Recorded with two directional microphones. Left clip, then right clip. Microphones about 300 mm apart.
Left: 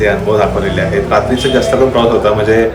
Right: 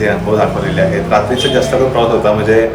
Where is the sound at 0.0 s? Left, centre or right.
Centre.